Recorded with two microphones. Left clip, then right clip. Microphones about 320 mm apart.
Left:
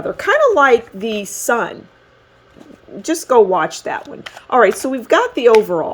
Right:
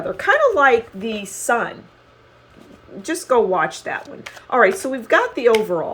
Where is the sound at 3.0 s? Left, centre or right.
Left.